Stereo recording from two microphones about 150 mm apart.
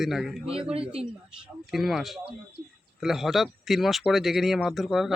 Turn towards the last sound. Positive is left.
turn(degrees=0)  # may be behind; listen again after turning